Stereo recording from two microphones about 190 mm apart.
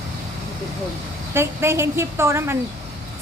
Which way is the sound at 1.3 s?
15° right (ahead or behind).